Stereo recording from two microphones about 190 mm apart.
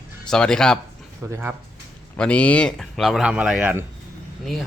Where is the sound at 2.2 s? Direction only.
5° left (ahead or behind).